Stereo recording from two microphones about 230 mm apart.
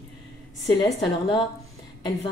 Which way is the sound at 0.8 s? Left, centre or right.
Centre.